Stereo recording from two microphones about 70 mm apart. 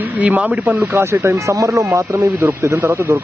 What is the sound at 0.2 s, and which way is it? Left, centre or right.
Speech, right.